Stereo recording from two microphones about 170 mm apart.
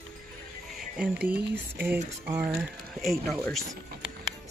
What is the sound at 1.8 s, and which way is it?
Speech, 10° right (ahead or behind).